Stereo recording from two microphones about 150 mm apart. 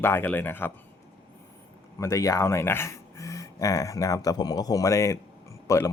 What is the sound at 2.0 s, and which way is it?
Speech, 20° left (ahead or behind).